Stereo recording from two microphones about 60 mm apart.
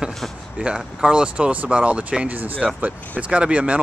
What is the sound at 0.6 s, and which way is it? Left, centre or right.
Speech, centre.